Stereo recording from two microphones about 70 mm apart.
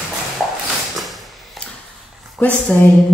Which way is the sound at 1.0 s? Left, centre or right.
Centre.